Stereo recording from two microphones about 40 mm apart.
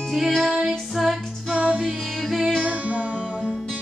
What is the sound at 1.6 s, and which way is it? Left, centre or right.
Music, right.